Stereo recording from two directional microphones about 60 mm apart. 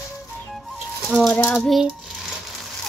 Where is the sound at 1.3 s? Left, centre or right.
Centre.